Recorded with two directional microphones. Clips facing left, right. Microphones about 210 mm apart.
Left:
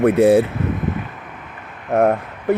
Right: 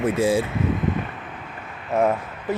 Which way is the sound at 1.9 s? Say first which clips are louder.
Left 5 dB; 60° left (ahead or behind).